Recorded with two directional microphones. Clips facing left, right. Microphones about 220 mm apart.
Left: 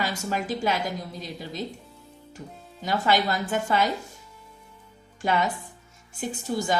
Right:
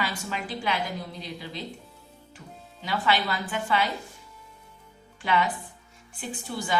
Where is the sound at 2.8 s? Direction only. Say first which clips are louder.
Left 3 dB; 45° left (ahead or behind).